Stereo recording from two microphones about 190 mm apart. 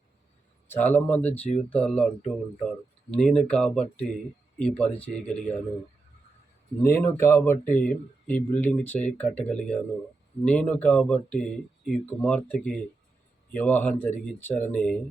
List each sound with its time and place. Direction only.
0.7 s speech: 10° left (ahead or behind)
6.8 s speech: 15° left (ahead or behind)